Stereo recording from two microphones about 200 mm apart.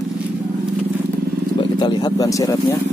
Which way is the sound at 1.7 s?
20° left (ahead or behind).